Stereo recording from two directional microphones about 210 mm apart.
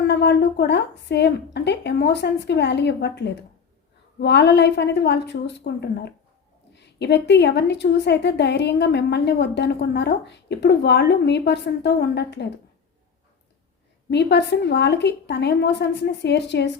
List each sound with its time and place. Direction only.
0.0 s a woman's voice: 55° left (ahead or behind)
14.1 s a woman's voice: 55° left (ahead or behind)